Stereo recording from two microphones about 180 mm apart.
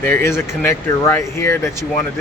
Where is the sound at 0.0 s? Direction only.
15° left (ahead or behind).